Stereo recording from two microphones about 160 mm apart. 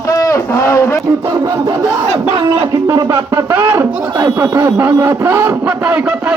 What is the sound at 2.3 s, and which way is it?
Speech, 35° right (ahead or behind).